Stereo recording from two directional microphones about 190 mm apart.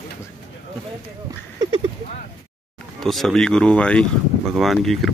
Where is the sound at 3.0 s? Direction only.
Centre (ahead or behind).